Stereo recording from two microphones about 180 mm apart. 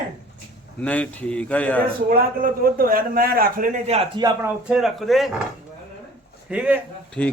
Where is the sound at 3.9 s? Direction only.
35° right (ahead or behind).